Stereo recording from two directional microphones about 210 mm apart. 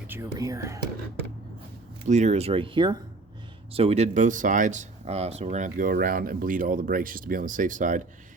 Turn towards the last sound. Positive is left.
turn(degrees=-40)  # may be behind; listen again after turning